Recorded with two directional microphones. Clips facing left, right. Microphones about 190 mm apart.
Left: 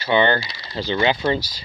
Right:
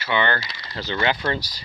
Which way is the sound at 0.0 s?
30° left (ahead or behind).